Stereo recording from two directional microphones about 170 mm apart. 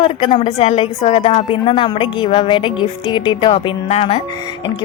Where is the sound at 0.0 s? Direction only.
35° left (ahead or behind).